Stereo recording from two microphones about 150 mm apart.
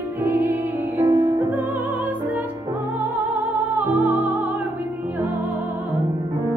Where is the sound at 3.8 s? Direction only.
Centre (ahead or behind).